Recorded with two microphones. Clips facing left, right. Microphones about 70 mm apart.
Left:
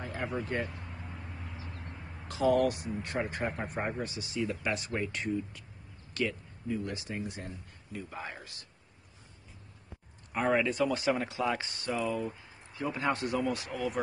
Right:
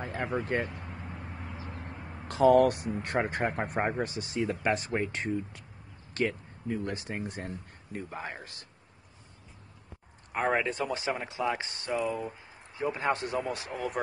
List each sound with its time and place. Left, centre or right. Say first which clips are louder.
0.0 s speech: right 3 dB; right
2.2 s speech: right 5 dB; right
10.3 s speech: even; right
11.9 s speech: right 1 dB; centre; by 13.8 s right